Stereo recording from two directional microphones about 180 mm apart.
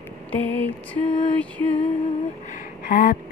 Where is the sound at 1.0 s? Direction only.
25° left (ahead or behind).